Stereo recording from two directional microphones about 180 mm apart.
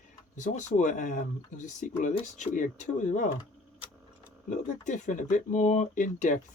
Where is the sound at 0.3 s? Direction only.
45° left (ahead or behind).